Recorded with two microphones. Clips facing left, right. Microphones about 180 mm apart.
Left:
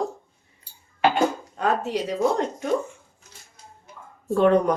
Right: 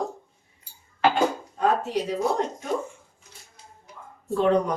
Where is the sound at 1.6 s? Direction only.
80° left.